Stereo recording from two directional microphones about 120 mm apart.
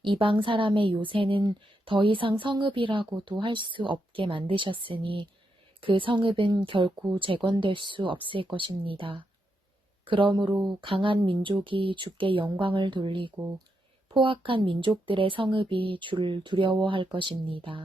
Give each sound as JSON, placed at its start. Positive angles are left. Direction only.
{"t": 0.0, "sound": "a woman's voice", "side_deg": -45}